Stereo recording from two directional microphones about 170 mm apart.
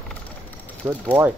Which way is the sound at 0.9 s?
10° right (ahead or behind).